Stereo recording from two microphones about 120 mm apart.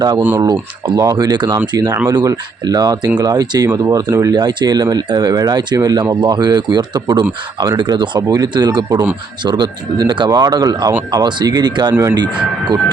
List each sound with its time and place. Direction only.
0.3 s speech: 35° right (ahead or behind)